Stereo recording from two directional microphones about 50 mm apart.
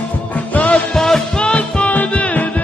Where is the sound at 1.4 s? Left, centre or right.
Left.